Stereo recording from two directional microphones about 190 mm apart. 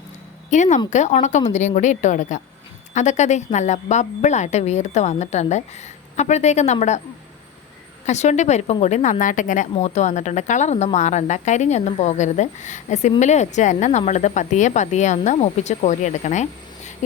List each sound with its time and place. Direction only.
0.5 s a woman's voice: 40° left (ahead or behind)
8.0 s a woman's voice: 40° left (ahead or behind)